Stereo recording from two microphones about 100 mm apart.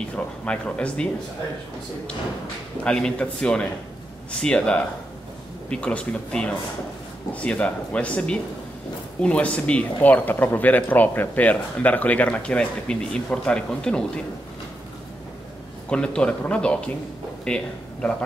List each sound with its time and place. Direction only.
0.1 s speech: 10° left (ahead or behind)
2.8 s speech: 10° left (ahead or behind)
15.9 s speech: 10° left (ahead or behind)